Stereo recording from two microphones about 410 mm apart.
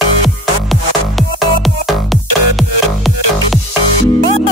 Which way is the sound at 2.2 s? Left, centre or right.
Left.